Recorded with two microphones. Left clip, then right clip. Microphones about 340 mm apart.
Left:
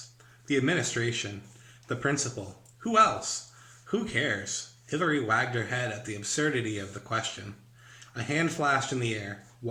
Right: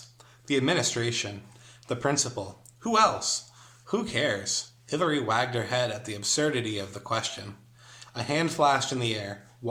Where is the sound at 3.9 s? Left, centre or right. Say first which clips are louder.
Right 2 dB; centre.